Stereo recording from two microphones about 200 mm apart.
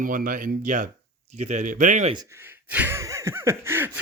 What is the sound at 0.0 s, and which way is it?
Speech, 45° right (ahead or behind).